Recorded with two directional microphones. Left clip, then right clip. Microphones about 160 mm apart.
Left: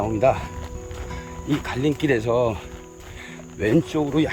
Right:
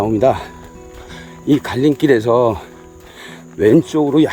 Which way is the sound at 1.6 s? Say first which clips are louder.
Right 8 dB; 45° right (ahead or behind).